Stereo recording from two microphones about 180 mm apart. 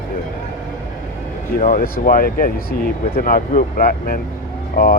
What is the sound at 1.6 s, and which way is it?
Speech, 50° left (ahead or behind).